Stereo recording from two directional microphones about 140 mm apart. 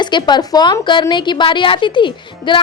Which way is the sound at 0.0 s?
35° left (ahead or behind).